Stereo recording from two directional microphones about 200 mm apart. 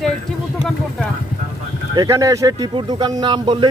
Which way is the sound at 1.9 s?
15° right (ahead or behind).